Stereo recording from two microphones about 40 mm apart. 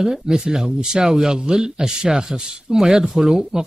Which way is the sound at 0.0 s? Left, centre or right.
Centre.